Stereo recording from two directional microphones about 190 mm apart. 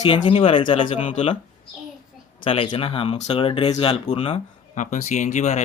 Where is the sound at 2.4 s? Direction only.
30° left (ahead or behind).